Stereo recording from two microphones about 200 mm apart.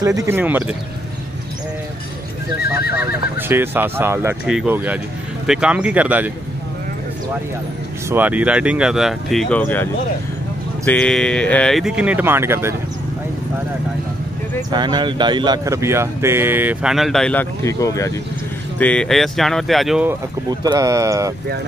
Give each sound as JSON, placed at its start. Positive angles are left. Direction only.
{"t": 0.0, "sound": "speech", "side_deg": -15}
{"t": 3.0, "sound": "speech", "side_deg": -10}
{"t": 8.1, "sound": "speech", "side_deg": -10}
{"t": 10.9, "sound": "speech", "side_deg": 5}
{"t": 14.7, "sound": "speech", "side_deg": -20}
{"t": 18.8, "sound": "speech", "side_deg": 5}
{"t": 20.6, "sound": "speech", "side_deg": -15}